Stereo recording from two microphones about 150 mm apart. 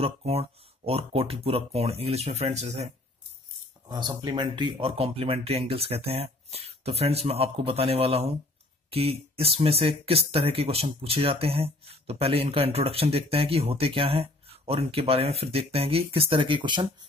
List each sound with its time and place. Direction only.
0.0 s speech: 45° right (ahead or behind)
3.9 s speech: 30° right (ahead or behind)